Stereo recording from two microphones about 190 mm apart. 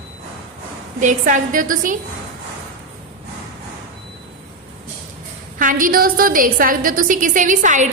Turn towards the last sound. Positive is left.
turn(degrees=-45)  # may be behind; listen again after turning